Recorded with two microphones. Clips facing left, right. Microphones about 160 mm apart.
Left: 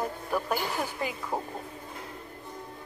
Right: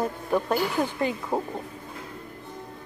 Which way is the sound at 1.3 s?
20° right (ahead or behind).